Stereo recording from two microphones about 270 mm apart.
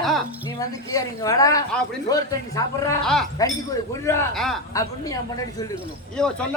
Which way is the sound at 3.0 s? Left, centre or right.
Centre.